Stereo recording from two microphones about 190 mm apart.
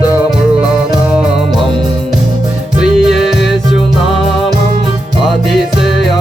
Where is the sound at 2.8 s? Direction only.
Centre (ahead or behind).